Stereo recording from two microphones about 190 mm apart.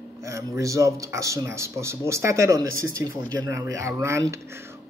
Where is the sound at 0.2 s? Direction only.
15° right (ahead or behind).